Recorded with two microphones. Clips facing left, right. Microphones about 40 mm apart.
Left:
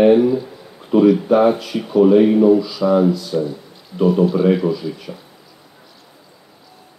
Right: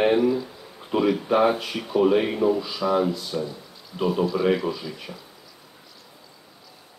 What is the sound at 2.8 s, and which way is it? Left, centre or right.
Speech, centre.